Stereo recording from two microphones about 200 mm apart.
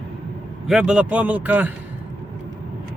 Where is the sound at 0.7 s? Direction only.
5° right (ahead or behind).